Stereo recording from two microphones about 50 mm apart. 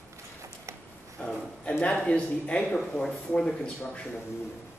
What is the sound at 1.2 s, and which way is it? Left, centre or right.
A man's voice, left.